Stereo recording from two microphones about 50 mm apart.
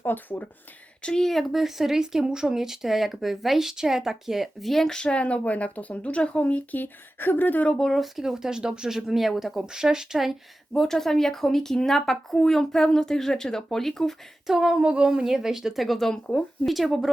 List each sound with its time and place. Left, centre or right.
0.0 s speech: left
1.0 s speech: centre
1.3 s speech: centre
4.7 s speech: centre; by 7.6 s left
7.8 s speech: centre
10.8 s speech: centre
14.4 s speech: centre